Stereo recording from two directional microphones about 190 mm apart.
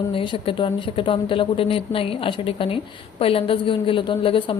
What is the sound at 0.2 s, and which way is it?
A woman's voice, 30° left (ahead or behind).